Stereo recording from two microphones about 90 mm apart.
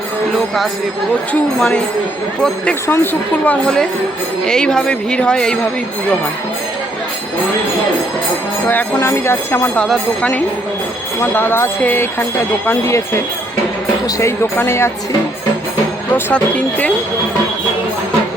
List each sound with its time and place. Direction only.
0.3 s speech: centre (ahead or behind)
3.0 s speech: 20° left (ahead or behind)
4.4 s speech: 5° left (ahead or behind)
9.0 s speech: 30° left (ahead or behind)
9.8 s speech: 5° left (ahead or behind)
11.3 s speech: 25° left (ahead or behind)
14.5 s speech: 25° left (ahead or behind)
16.3 s speech: 15° left (ahead or behind)